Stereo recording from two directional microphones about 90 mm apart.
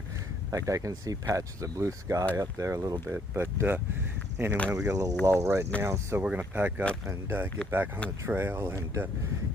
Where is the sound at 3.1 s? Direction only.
25° right (ahead or behind).